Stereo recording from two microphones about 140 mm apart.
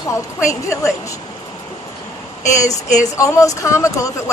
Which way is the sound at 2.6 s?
55° left (ahead or behind).